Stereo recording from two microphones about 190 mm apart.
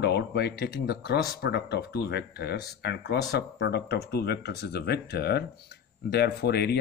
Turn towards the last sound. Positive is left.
turn(degrees=60)  # may be behind; listen again after turning